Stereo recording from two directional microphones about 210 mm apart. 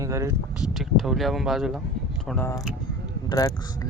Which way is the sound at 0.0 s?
15° right (ahead or behind).